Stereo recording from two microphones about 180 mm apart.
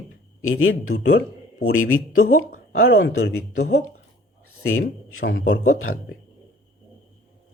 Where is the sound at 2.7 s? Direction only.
60° left (ahead or behind).